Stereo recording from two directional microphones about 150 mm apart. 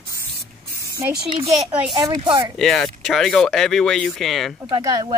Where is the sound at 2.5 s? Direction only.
Centre (ahead or behind).